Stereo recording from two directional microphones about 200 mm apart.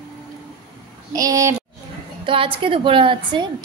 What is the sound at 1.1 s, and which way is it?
A woman's voice, 15° right (ahead or behind).